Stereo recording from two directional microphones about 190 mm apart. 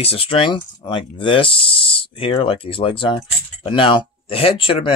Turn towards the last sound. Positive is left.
turn(degrees=30)  # may be behind; listen again after turning